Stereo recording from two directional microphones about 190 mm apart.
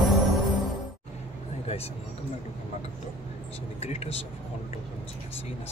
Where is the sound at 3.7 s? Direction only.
35° left (ahead or behind).